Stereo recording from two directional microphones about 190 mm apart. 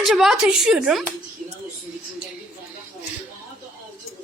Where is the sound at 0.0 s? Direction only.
Centre (ahead or behind).